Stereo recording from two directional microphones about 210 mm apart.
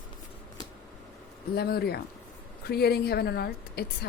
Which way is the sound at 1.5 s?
45° left (ahead or behind).